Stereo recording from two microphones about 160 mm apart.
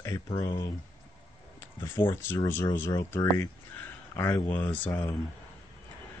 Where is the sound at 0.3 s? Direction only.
30° left (ahead or behind).